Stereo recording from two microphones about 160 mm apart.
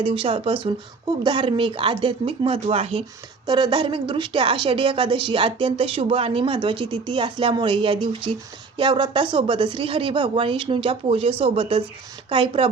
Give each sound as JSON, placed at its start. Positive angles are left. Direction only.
{"t": 0.0, "sound": "a woman's voice", "side_deg": -35}
{"t": 3.4, "sound": "a woman's voice", "side_deg": -25}